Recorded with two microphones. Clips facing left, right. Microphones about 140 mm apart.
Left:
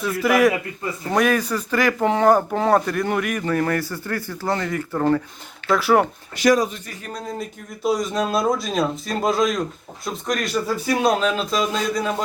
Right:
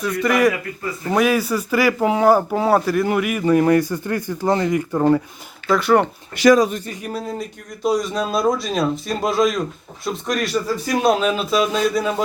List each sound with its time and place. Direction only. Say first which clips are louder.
0.0 s speech: even; 5° left (ahead or behind); by 5.2 s 15° right (ahead or behind)
5.6 s speech: right 1 dB; centre (ahead or behind)
6.3 s speech: right 4 dB; 80° right
7.0 s speech: even; 5° right (ahead or behind)